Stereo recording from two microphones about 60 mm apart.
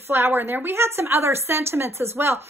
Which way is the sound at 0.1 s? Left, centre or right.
Right.